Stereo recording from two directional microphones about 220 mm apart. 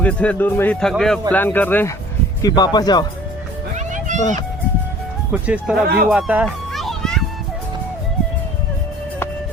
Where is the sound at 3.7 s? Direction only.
35° right (ahead or behind).